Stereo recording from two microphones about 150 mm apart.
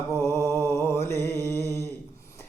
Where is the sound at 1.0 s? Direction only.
15° left (ahead or behind).